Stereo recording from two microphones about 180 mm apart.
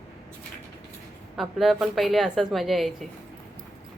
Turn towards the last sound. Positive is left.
turn(degrees=0)  # may be behind; listen again after turning